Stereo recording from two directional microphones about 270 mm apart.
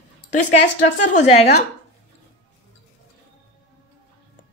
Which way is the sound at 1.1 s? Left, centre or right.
Left.